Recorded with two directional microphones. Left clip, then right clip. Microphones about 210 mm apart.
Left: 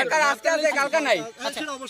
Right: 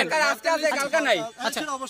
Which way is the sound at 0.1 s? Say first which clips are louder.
Left 2 dB; 15° right (ahead or behind).